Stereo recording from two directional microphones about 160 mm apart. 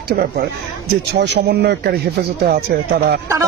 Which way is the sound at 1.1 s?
90° right.